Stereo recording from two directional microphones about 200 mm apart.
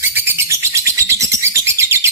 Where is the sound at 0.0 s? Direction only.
10° right (ahead or behind).